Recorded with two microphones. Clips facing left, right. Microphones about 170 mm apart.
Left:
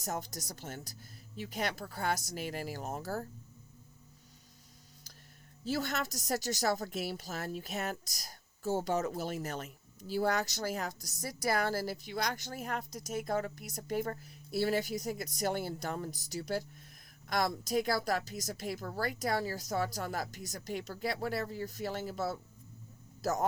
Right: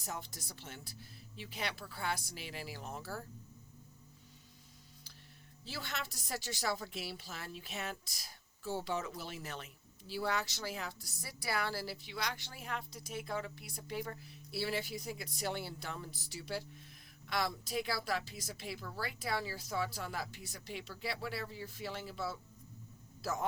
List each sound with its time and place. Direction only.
0.0 s a woman's voice: 45° left (ahead or behind)
5.6 s a woman's voice: 45° left (ahead or behind)